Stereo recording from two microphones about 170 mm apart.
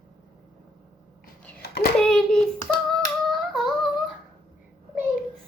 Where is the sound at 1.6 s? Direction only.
65° left (ahead or behind).